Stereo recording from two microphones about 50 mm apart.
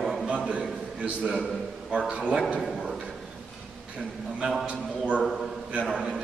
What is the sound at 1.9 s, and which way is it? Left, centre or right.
Speech, right.